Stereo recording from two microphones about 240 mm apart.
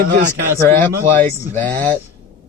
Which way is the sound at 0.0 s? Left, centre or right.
Right.